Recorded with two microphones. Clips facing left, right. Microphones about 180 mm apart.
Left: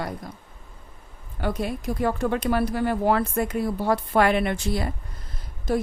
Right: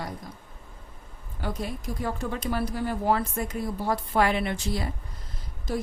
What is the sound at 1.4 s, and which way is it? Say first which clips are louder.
Speech: left 5 dB; 65° left (ahead or behind).